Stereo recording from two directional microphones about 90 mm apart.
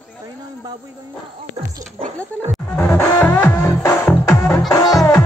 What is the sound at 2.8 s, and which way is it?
Music, 20° left (ahead or behind).